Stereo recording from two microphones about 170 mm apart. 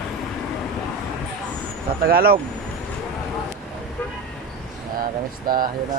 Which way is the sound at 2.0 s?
65° right (ahead or behind).